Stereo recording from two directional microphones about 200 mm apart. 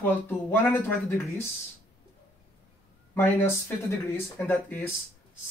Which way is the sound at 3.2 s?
10° left (ahead or behind).